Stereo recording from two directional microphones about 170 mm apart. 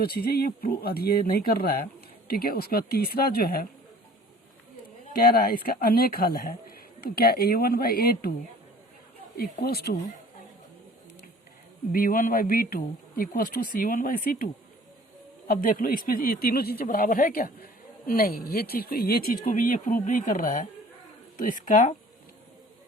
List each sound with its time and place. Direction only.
0.0 s speech: 65° left (ahead or behind)
5.2 s speech: 60° left (ahead or behind)
9.4 s speech: 65° left (ahead or behind)
11.9 s speech: 55° left (ahead or behind)